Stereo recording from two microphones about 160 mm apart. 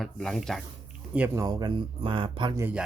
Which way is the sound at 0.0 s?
Centre (ahead or behind).